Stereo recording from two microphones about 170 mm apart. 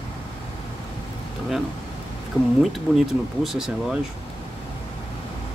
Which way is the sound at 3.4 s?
Centre (ahead or behind).